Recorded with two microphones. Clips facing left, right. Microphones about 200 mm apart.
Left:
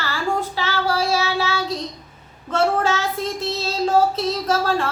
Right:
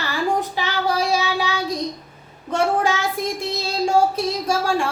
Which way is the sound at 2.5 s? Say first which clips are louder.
Even; 15° right (ahead or behind).